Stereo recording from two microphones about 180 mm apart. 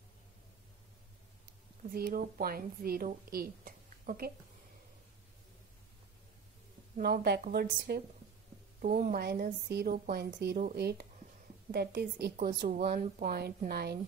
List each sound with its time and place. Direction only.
1.9 s a woman's voice: 55° right (ahead or behind)
7.0 s a woman's voice: 65° right (ahead or behind)
7.4 s a woman's voice: 50° right (ahead or behind)
12.4 s a woman's voice: 45° right (ahead or behind)